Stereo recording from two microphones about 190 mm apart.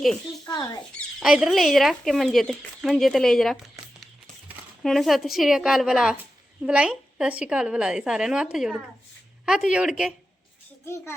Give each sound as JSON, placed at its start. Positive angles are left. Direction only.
{"t": 0.0, "sound": "speech", "side_deg": 0}
{"t": 0.4, "sound": "speech", "side_deg": 20}
{"t": 0.9, "sound": "a woman's voice", "side_deg": -5}
{"t": 10.8, "sound": "a child's voice", "side_deg": 15}